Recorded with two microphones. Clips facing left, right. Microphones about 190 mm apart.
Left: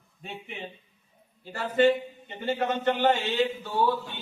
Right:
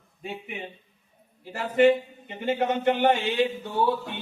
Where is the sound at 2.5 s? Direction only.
20° right (ahead or behind).